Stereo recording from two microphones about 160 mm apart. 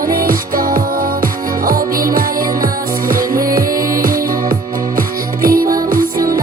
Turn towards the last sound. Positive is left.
turn(degrees=-65)  # may be behind; listen again after turning